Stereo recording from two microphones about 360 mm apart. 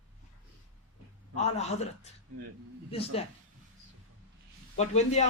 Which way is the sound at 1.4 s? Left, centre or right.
Centre.